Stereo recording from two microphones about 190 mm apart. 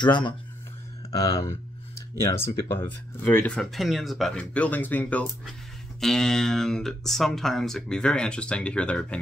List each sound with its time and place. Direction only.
0.0 s speech: 25° left (ahead or behind)
2.2 s speech: 15° left (ahead or behind)